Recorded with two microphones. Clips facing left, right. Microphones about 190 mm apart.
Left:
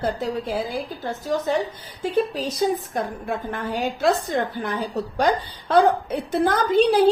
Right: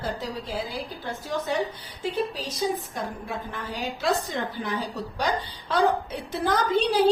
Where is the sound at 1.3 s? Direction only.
45° left (ahead or behind).